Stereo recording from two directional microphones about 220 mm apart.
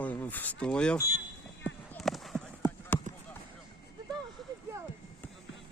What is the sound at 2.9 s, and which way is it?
Basketball bounce, 10° left (ahead or behind).